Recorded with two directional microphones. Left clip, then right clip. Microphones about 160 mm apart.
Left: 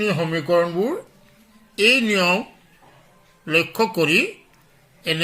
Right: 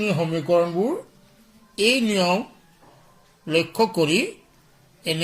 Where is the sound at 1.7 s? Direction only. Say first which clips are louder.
Left 3 dB; 10° right (ahead or behind).